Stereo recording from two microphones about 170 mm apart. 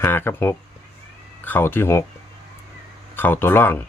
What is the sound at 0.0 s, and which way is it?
Speech, 15° left (ahead or behind).